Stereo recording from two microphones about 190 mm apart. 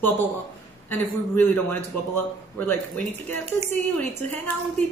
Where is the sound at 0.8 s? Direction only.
10° left (ahead or behind).